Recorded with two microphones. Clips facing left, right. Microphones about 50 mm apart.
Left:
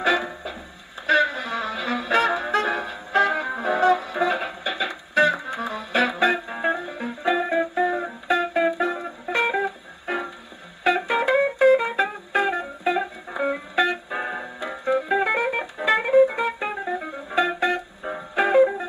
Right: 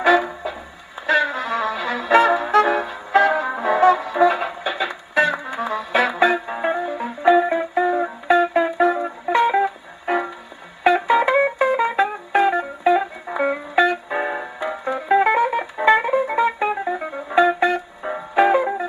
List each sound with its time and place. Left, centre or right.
0.0 s music: right
2.1 s brass instrument: right
2.4 s music: right
10.8 s music: centre